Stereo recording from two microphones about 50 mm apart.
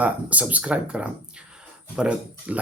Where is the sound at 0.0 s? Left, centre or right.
Right.